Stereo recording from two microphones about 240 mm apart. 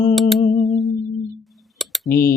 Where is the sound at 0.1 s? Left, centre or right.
Centre.